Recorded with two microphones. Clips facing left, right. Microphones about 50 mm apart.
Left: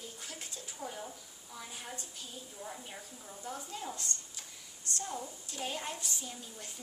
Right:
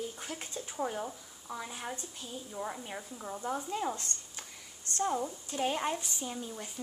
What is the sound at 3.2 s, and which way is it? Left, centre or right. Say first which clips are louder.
Speech: right 8 dB; right.